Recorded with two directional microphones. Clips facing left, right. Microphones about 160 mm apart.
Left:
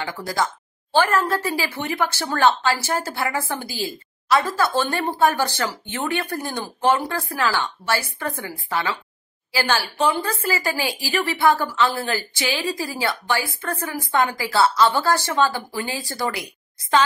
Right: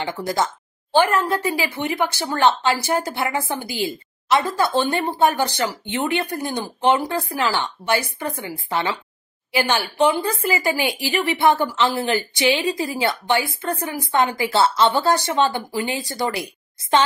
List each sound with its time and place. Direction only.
0.0 s a woman's voice: 25° right (ahead or behind)